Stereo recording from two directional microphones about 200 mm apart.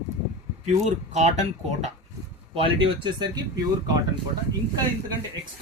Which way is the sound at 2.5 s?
25° right (ahead or behind).